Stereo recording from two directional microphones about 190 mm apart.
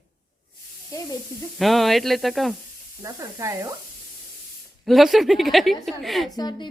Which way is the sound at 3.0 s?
15° right (ahead or behind).